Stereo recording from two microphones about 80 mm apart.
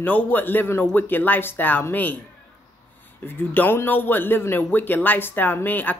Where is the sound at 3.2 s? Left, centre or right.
Left.